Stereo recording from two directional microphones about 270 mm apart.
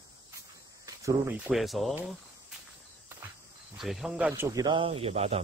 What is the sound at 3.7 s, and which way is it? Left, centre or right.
Speech, centre.